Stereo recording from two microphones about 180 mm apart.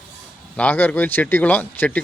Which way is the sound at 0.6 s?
10° left (ahead or behind).